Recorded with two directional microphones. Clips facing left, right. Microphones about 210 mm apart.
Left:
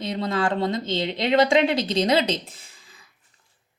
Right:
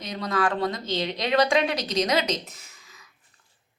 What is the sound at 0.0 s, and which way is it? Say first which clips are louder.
A woman's voice: left 2 dB; 25° left (ahead or behind).